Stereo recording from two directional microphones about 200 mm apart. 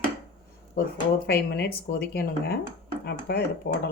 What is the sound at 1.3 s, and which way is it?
A woman's voice, 50° left (ahead or behind).